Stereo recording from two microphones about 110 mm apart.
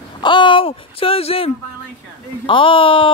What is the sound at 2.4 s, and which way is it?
Speech, 50° left (ahead or behind).